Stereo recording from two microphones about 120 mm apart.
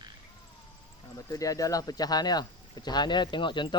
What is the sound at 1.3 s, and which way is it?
Speech, 30° left (ahead or behind).